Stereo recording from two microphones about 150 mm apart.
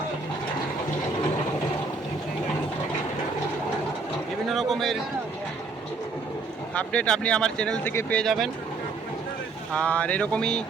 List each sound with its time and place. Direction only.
4.4 s a sound: centre (ahead or behind)
6.7 s speech: 10° left (ahead or behind)
9.7 s speech: 10° left (ahead or behind)